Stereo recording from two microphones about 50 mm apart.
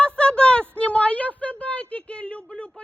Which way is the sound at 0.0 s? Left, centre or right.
Left.